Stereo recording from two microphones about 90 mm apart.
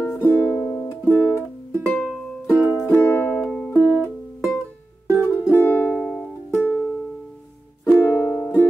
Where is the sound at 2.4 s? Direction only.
25° left (ahead or behind).